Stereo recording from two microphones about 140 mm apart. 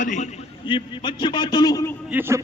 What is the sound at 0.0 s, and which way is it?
Speech, 60° left (ahead or behind).